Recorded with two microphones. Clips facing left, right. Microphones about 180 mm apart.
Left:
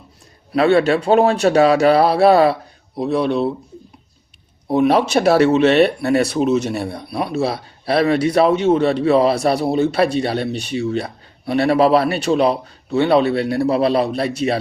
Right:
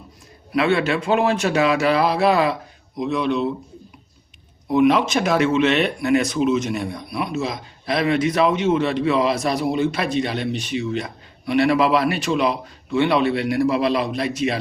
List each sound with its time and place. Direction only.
0.5 s speech: 35° left (ahead or behind)
4.7 s speech: 35° left (ahead or behind)